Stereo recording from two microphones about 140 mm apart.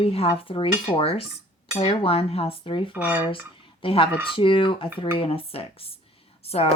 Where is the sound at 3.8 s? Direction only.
40° left (ahead or behind).